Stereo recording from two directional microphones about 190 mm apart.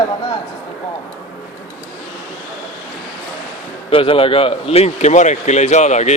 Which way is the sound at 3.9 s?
30° left (ahead or behind).